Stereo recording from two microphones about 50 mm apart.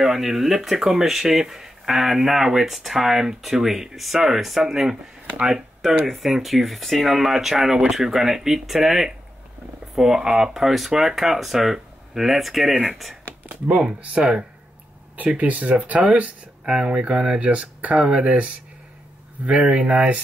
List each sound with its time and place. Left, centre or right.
0.0 s speech: centre
6.0 s speech: centre
13.7 s speech: centre